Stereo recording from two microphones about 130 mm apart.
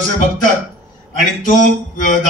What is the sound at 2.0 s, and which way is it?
Speech, 90° left.